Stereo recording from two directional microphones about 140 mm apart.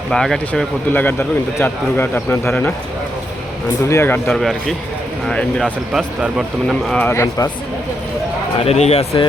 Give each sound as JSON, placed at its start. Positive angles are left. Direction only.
{"t": 0.1, "sound": "speech", "side_deg": 5}
{"t": 0.9, "sound": "a man's voice", "side_deg": 15}
{"t": 3.8, "sound": "speech", "side_deg": 20}
{"t": 4.3, "sound": "a man's voice", "side_deg": 0}
{"t": 7.0, "sound": "speech", "side_deg": 20}
{"t": 8.5, "sound": "speech", "side_deg": 50}